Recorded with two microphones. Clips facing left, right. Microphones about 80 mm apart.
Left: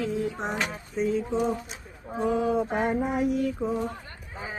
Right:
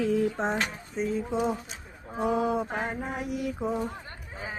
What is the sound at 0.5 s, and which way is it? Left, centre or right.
Speech, centre.